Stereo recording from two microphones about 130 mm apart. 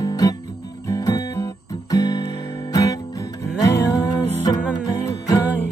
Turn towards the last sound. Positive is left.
turn(degrees=25)  # may be behind; listen again after turning